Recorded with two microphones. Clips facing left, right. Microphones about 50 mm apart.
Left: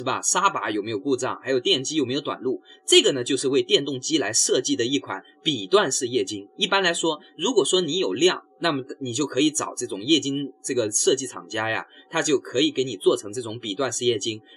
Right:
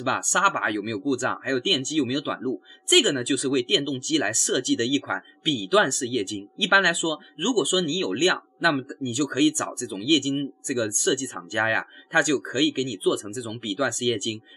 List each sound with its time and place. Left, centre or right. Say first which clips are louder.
0.0 s speech: even; centre
0.7 s speech: left 2 dB; centre
1.0 s speech: right 1 dB; right